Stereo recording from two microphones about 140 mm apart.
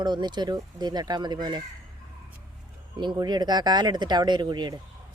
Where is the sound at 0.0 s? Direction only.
30° right (ahead or behind).